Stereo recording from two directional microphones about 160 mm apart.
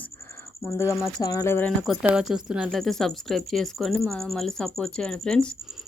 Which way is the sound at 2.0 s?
5° right (ahead or behind).